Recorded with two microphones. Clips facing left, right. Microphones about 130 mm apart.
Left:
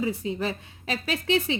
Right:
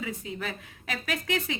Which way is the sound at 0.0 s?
30° left (ahead or behind).